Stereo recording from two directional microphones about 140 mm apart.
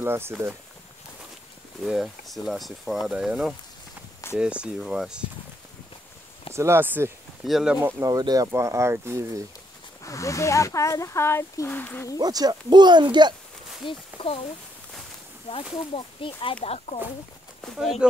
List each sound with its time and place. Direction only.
0.0 s speech: 15° right (ahead or behind)
1.8 s speech: centre (ahead or behind)
6.5 s speech: 20° right (ahead or behind)
7.4 s speech: 5° right (ahead or behind)
8.0 s speech: 25° right (ahead or behind)
10.0 s speech: 20° left (ahead or behind)
12.2 s speech: 25° right (ahead or behind)
13.8 s speech: 40° left (ahead or behind)
15.9 s speech: 40° left (ahead or behind)
17.6 s speech: centre (ahead or behind)